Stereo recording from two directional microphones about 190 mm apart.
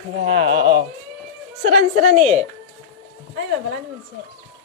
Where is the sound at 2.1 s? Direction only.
35° right (ahead or behind).